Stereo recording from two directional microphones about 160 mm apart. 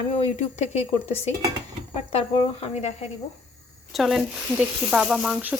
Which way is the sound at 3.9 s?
Centre (ahead or behind).